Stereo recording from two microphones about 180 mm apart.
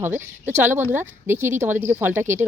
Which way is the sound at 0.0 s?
10° right (ahead or behind).